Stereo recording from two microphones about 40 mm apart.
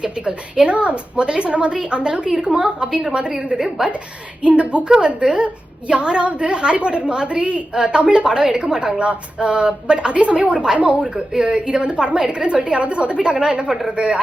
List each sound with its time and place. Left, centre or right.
0.0 s a woman's voice: right
4.4 s a woman's voice: right